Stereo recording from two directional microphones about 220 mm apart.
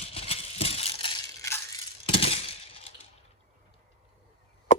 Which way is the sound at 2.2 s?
25° left (ahead or behind).